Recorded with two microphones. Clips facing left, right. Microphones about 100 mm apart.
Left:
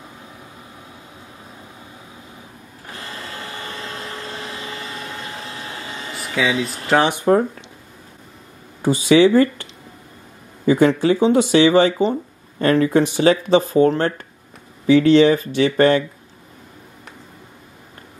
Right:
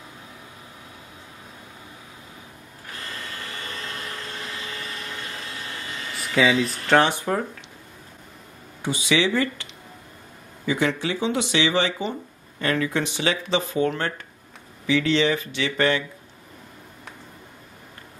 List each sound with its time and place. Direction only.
3.3 s vacuum cleaner: 25° left (ahead or behind)
6.3 s speech: centre (ahead or behind)
8.8 s speech: 40° left (ahead or behind)